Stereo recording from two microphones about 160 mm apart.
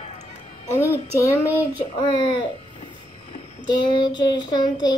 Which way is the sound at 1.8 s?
30° left (ahead or behind).